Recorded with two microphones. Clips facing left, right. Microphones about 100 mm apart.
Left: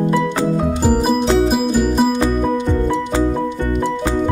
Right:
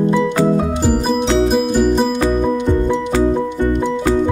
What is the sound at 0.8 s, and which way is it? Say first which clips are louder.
Music: left 3 dB; 5° left (ahead or behind).